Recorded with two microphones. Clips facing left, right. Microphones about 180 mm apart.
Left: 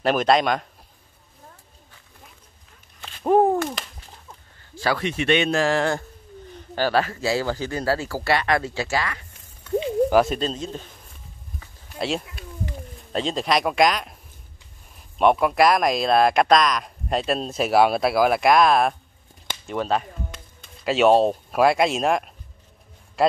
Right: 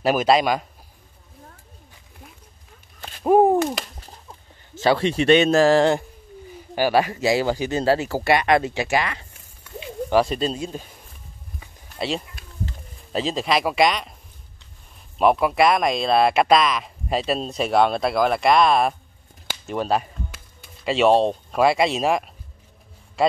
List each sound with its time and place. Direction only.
0.0 s speech: 5° right (ahead or behind)
3.3 s a sound: 15° right (ahead or behind)
4.7 s speech: 25° right (ahead or behind)
6.4 s speech: 10° right (ahead or behind)
10.0 s speech: centre (ahead or behind)
10.5 s speech: 10° right (ahead or behind)
12.0 s a sound: centre (ahead or behind)
12.9 s speech: centre (ahead or behind)
15.1 s speech: centre (ahead or behind)
19.4 s speech: 10° right (ahead or behind)
23.2 s a sound: centre (ahead or behind)